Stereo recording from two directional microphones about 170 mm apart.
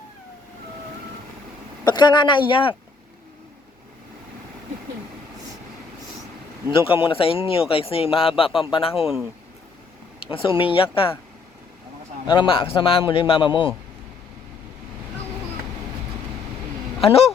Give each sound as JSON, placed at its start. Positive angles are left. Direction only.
{"t": 1.8, "sound": "speech", "side_deg": 25}
{"t": 6.7, "sound": "speech", "side_deg": 30}
{"t": 10.3, "sound": "speech", "side_deg": 30}
{"t": 12.3, "sound": "speech", "side_deg": 30}
{"t": 17.0, "sound": "speech", "side_deg": 35}